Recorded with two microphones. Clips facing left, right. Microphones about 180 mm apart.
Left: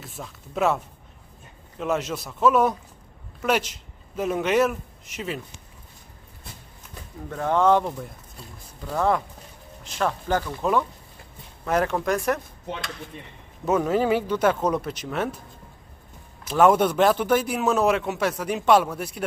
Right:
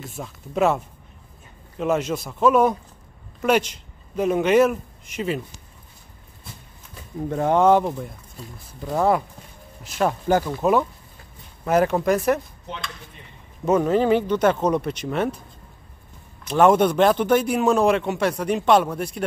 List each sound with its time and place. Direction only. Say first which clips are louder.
0.0 s a man's voice: right 4 dB; centre (ahead or behind)
7.2 s a man's voice: right 3 dB; 20° right (ahead or behind); by 12.4 s 5° right (ahead or behind)
13.7 s a man's voice: right 3 dB; 5° left (ahead or behind)
16.4 s a man's voice: right 2 dB; 5° left (ahead or behind)